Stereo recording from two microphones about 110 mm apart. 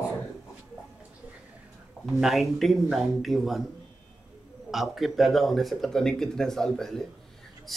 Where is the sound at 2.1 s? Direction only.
Centre (ahead or behind).